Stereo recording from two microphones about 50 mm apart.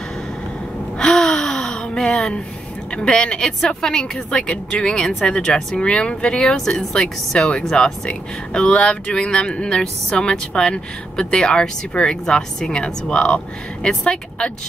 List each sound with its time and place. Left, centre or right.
0.9 s gasp: centre
2.0 s a woman's voice: centre